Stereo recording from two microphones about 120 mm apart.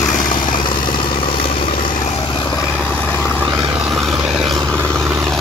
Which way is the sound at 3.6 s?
5° right (ahead or behind).